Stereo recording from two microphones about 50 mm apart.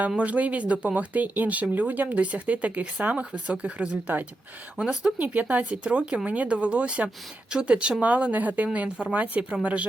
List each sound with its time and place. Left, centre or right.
0.2 s speech: right
4.8 s speech: centre
5.1 s speech: right